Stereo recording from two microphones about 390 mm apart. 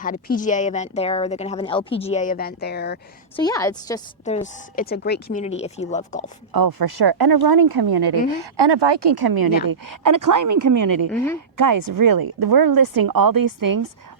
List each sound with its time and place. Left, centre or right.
0.0 s speech: left
3.3 s a woman's voice: centre
6.5 s speech: right
8.3 s speech: right